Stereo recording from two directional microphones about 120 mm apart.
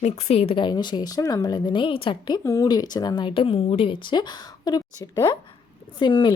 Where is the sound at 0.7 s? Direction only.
35° left (ahead or behind).